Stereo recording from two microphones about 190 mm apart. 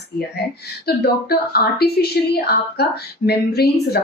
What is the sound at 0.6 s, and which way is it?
A woman's voice, 55° left (ahead or behind).